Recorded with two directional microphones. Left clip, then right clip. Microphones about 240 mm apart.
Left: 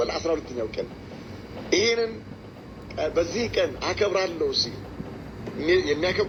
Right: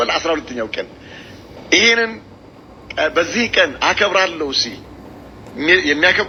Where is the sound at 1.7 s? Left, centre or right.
Right.